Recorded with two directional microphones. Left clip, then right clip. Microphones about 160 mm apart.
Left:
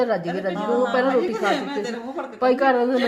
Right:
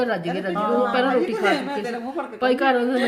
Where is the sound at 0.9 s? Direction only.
10° left (ahead or behind).